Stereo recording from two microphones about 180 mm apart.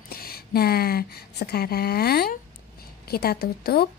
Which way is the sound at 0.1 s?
60° left (ahead or behind).